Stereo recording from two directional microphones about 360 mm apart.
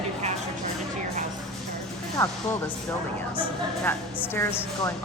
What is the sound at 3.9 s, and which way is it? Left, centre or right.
A woman's voice, centre.